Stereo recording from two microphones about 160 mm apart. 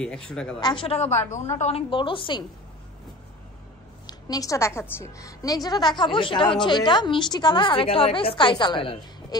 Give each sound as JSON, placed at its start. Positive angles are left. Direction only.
{"t": 0.0, "sound": "speech", "side_deg": 5}
{"t": 0.6, "sound": "a woman's voice", "side_deg": 30}
{"t": 4.1, "sound": "a woman's voice", "side_deg": 20}